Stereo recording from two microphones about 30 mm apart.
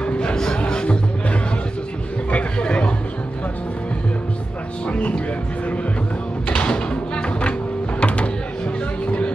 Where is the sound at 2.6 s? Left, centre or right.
Left.